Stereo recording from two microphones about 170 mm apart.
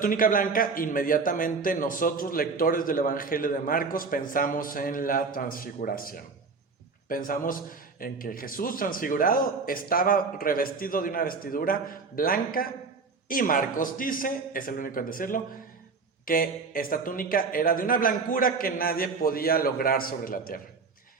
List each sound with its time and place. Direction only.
0.0 s a man's voice: 55° left (ahead or behind)